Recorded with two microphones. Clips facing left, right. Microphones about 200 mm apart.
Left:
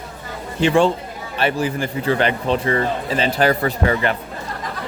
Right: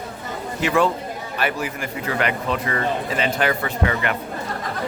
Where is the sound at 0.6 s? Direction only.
30° left (ahead or behind).